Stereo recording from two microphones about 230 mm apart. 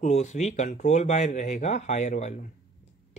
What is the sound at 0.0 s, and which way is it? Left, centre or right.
A man's voice, left.